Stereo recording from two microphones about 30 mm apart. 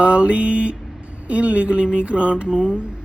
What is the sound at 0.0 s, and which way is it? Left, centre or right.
Mantra, right.